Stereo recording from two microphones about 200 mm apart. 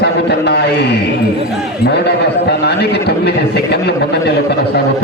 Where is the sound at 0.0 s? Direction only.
55° left (ahead or behind).